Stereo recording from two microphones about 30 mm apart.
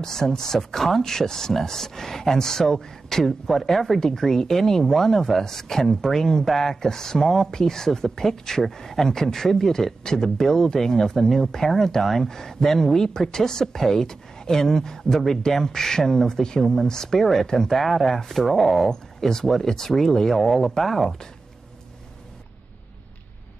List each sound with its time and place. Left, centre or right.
0.0 s speech: centre
4.0 s speech: centre
11.2 s speech: centre
11.5 s speech: centre
17.7 s speech: centre
18.9 s speech: centre